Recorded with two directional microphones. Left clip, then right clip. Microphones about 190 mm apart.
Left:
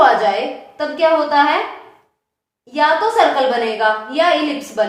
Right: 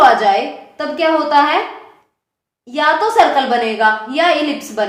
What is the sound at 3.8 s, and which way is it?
A woman's voice, 30° right (ahead or behind).